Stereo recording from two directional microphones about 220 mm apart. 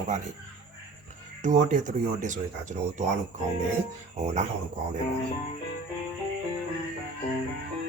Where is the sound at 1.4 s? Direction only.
35° right (ahead or behind).